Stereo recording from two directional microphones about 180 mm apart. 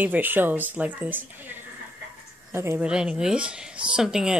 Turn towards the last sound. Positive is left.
turn(degrees=-5)  # may be behind; listen again after turning